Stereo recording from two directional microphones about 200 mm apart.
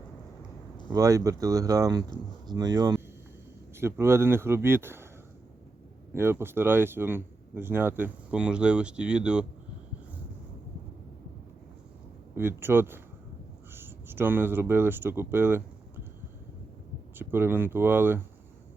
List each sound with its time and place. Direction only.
0.9 s speech: 15° right (ahead or behind)
6.1 s speech: 10° right (ahead or behind)
12.3 s speech: 10° right (ahead or behind)
17.2 s speech: 10° right (ahead or behind)